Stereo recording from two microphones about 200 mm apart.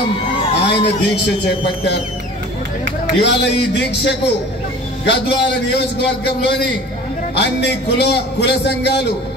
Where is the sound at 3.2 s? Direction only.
60° left (ahead or behind).